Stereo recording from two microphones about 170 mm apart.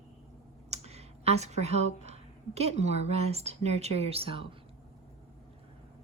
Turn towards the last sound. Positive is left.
turn(degrees=-30)  # may be behind; listen again after turning